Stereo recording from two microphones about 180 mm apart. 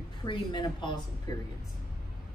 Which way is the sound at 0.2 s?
25° left (ahead or behind).